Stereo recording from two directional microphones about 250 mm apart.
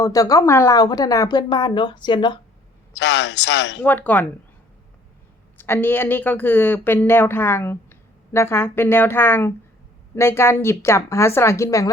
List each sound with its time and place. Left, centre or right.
0.0 s speech: centre
2.9 s speech: left
3.8 s speech: centre
5.5 s speech: centre